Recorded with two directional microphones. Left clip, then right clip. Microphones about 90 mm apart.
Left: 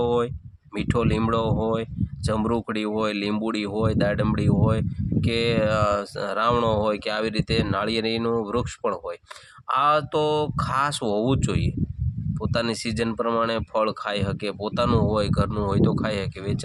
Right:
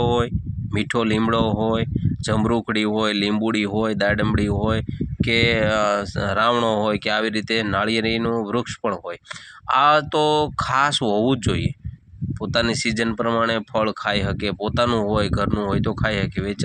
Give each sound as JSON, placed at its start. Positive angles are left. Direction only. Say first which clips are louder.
{"t": 0.0, "sound": "a sound", "louder": "right 2 dB", "side_deg": -25}
{"t": 0.7, "sound": "speech", "louder": "right 3 dB", "side_deg": -30}
{"t": 9.6, "sound": "speech", "louder": "right 4 dB", "side_deg": -35}